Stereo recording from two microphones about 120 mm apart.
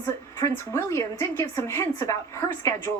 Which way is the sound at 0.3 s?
20° left (ahead or behind).